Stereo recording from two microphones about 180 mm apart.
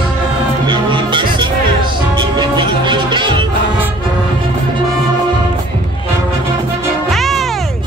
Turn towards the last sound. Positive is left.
turn(degrees=0)  # may be behind; listen again after turning